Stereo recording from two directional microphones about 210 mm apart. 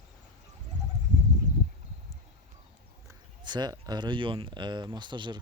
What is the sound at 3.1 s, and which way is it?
Speech, 20° right (ahead or behind).